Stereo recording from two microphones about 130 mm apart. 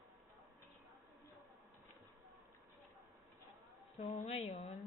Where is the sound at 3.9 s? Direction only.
55° left (ahead or behind).